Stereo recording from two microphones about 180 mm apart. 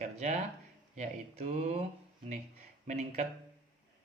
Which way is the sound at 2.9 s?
40° right (ahead or behind).